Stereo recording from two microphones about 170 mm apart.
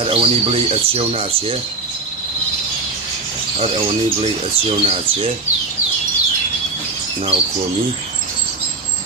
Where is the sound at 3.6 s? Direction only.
35° right (ahead or behind).